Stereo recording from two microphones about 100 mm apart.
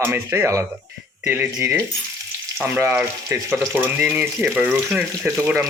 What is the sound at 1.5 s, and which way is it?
Stir, 35° right (ahead or behind).